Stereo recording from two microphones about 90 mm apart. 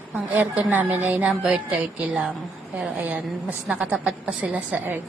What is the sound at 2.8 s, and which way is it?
A woman's voice, 15° right (ahead or behind).